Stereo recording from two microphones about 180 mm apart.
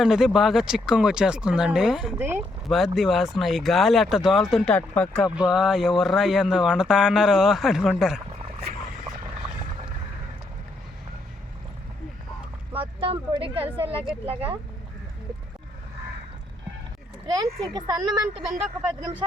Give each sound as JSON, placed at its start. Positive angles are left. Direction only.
{"t": 0.0, "sound": "speech", "side_deg": -5}
{"t": 2.6, "sound": "speech", "side_deg": 0}
{"t": 5.3, "sound": "speech", "side_deg": -5}
{"t": 12.7, "sound": "a sound", "side_deg": -30}
{"t": 13.7, "sound": "speech", "side_deg": -10}
{"t": 14.3, "sound": "speech", "side_deg": -30}
{"t": 17.2, "sound": "speech", "side_deg": -20}